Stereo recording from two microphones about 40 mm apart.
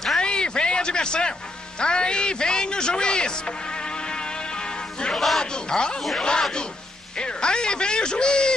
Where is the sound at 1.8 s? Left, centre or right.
Left.